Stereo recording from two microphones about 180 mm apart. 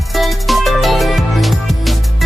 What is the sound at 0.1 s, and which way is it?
Music, centre (ahead or behind).